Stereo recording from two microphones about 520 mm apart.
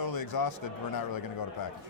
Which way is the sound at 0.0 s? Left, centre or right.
Left.